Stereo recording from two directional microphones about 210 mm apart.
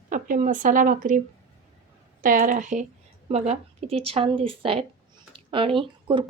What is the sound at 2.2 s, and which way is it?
Speech, 40° right (ahead or behind).